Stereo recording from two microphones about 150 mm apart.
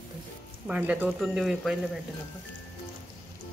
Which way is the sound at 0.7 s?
10° right (ahead or behind).